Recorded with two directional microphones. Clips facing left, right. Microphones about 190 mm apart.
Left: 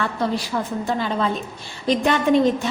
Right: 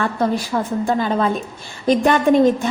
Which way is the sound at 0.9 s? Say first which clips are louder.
Right 4 dB; 50° right (ahead or behind).